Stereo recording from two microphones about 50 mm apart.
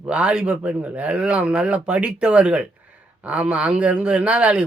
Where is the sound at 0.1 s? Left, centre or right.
Right.